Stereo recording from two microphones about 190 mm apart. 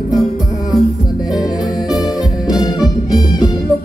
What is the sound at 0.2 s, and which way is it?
Music, centre (ahead or behind).